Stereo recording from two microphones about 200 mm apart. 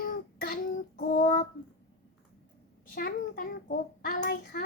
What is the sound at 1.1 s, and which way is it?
Child singing, 40° left (ahead or behind).